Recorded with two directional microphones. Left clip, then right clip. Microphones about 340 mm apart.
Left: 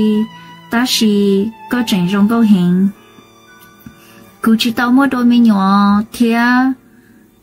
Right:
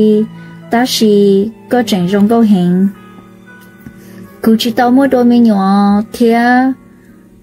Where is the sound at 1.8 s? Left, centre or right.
Centre.